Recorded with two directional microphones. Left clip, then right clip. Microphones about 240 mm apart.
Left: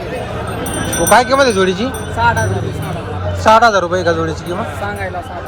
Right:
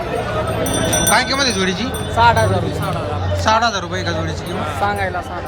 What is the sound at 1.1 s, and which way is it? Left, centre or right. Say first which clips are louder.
Speech: left 8 dB; centre.